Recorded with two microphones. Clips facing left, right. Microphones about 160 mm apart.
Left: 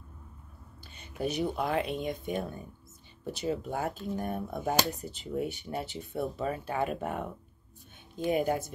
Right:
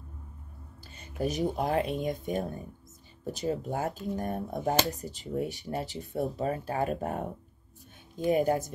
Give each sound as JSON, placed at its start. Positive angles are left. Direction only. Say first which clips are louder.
{"t": 0.9, "sound": "speech", "louder": "right 1 dB", "side_deg": -40}